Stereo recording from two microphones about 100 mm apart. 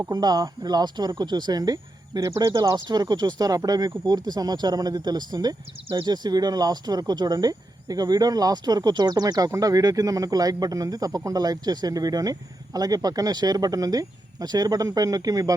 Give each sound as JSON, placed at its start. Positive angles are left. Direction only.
{"t": 0.1, "sound": "speech", "side_deg": -40}